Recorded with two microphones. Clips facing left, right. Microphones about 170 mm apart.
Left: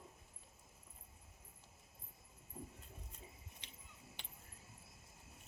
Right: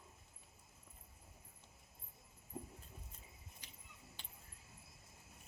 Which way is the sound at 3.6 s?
25° left (ahead or behind).